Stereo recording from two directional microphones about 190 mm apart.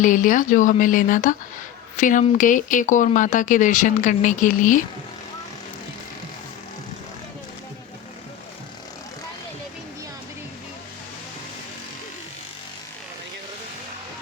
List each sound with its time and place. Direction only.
0.0 s speech: 45° left (ahead or behind)